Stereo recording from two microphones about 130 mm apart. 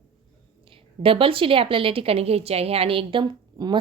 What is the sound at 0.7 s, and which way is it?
A woman's voice, 45° right (ahead or behind).